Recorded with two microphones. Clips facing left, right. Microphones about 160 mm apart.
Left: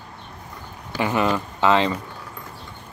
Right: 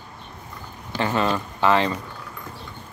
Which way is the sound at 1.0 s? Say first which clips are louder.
Left 1 dB; 15° left (ahead or behind).